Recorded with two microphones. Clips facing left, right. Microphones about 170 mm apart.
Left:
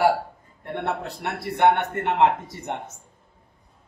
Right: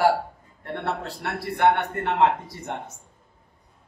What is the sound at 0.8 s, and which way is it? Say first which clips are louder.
Speech: left 1 dB; 20° left (ahead or behind).